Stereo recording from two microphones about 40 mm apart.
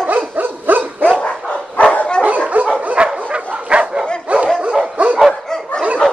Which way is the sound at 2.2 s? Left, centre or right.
Right.